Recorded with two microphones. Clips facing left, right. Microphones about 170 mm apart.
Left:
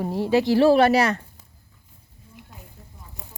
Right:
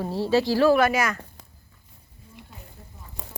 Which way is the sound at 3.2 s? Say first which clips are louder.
Right 4 dB; 90° right.